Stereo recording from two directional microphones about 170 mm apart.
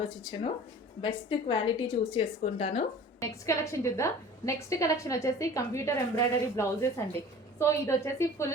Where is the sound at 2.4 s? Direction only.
40° left (ahead or behind).